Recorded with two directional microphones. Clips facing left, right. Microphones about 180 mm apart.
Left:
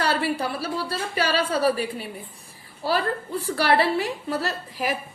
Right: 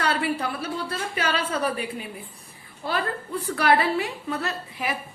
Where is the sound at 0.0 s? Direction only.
30° left (ahead or behind).